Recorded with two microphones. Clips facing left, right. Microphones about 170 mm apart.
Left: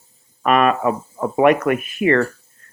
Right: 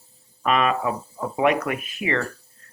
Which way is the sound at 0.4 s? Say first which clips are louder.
Left 5 dB; 55° left (ahead or behind).